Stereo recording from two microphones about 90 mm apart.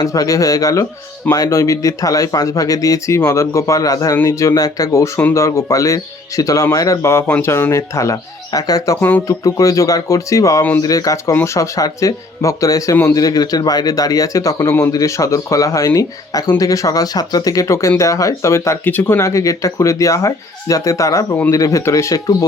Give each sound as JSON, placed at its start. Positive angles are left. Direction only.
{"t": 0.0, "sound": "speech", "side_deg": 40}
{"t": 9.0, "sound": "speech", "side_deg": 20}
{"t": 9.2, "sound": "speech", "side_deg": 40}